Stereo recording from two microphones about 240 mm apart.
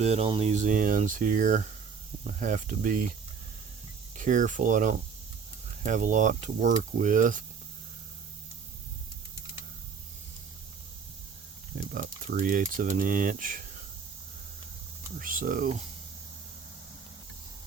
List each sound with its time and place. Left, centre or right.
0.0 s speech: right
4.2 s speech: right
11.9 s speech: right
15.2 s speech: right